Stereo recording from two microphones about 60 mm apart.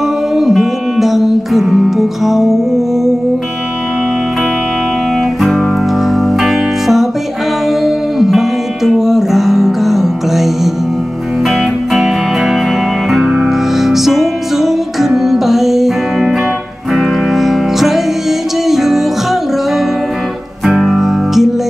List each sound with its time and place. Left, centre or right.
0.4 s music: centre
6.0 s music: centre
20.6 s music: centre